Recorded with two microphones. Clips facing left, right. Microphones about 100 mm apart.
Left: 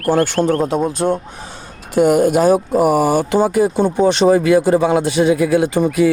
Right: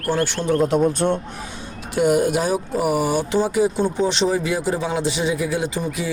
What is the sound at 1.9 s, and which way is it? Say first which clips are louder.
Speech: left 5 dB; 50° left (ahead or behind).